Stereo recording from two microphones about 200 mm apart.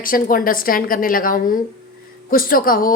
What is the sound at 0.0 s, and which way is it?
A woman's voice, 45° left (ahead or behind).